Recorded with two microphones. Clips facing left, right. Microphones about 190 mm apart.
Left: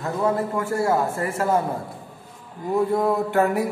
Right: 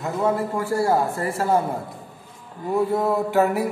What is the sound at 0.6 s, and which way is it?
Speech, 35° right (ahead or behind).